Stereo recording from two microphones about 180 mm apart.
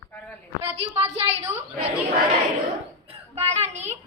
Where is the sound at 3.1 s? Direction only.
35° right (ahead or behind).